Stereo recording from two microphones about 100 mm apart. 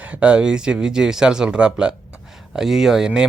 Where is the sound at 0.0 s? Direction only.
15° right (ahead or behind).